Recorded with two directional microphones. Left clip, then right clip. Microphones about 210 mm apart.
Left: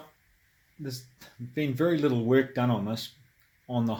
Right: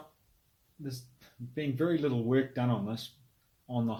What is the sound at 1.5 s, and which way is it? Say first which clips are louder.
Speech: left 4 dB; 50° left (ahead or behind).